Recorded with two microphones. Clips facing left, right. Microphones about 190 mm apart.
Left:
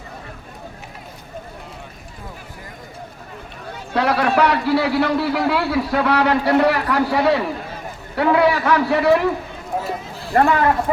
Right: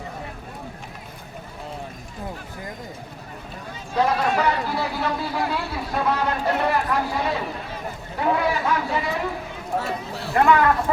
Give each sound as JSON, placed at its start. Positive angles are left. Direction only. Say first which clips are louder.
{"t": 3.8, "sound": "a man's voice", "louder": "left 3 dB", "side_deg": 70}
{"t": 10.3, "sound": "speech", "louder": "left 3 dB", "side_deg": 45}
{"t": 10.9, "sound": "speech", "louder": "left 4 dB", "side_deg": 20}